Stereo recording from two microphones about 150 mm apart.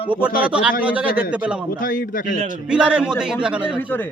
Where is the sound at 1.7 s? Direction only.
65° left (ahead or behind).